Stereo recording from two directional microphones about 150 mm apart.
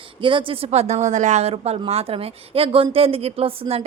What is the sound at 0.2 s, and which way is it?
Speech, 35° right (ahead or behind).